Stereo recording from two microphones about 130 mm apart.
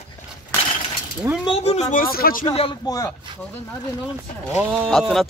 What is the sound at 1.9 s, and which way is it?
Speech, 90° left.